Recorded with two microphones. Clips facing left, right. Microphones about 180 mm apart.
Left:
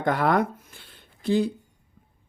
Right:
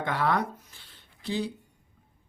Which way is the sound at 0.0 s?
50° left (ahead or behind).